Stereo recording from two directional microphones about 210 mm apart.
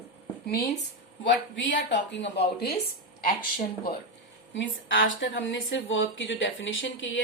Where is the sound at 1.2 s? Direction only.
60° left (ahead or behind).